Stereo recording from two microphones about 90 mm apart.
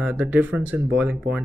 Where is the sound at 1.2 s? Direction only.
5° right (ahead or behind).